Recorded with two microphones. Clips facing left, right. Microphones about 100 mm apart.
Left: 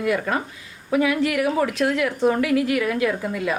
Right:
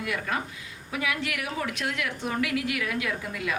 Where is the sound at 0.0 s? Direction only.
40° left (ahead or behind).